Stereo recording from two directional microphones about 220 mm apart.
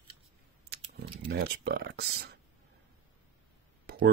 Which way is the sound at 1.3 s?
45° right (ahead or behind).